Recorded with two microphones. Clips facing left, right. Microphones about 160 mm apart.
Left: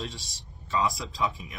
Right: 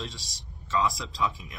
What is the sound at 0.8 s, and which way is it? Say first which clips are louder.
Speech: even; centre (ahead or behind).